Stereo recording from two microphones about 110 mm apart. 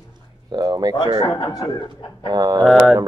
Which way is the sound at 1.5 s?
35° left (ahead or behind).